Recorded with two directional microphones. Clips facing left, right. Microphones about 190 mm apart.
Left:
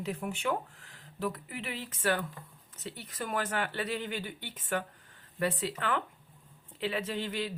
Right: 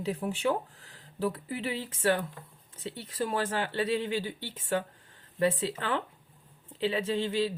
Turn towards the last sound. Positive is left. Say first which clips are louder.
# right 6 dB
turn(degrees=-25)  # may be behind; listen again after turning